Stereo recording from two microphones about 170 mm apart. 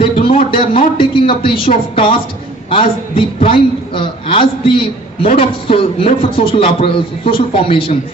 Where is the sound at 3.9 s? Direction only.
30° left (ahead or behind).